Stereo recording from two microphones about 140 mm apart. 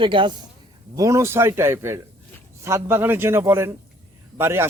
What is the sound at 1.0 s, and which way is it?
A man's voice, 20° right (ahead or behind).